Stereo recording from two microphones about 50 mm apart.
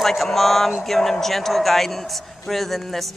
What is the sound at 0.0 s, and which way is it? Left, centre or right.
A man's voice, centre.